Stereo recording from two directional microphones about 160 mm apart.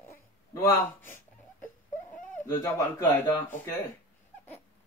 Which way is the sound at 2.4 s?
25° left (ahead or behind).